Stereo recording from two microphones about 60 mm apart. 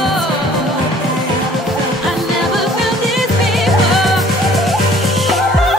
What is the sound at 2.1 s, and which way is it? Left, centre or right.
Music, centre.